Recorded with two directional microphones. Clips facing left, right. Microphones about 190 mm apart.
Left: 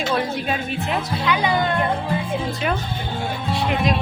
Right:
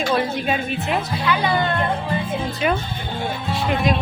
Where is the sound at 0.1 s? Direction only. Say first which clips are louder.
Right 2 dB; 5° right (ahead or behind).